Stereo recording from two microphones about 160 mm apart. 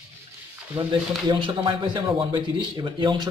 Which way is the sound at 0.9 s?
30° right (ahead or behind).